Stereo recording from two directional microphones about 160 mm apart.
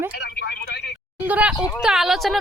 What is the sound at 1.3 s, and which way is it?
Speech, 10° right (ahead or behind).